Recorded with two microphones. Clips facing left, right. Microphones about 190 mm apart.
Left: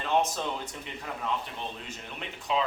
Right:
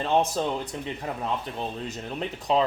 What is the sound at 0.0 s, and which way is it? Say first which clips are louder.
Speech: right 4 dB; 35° right (ahead or behind).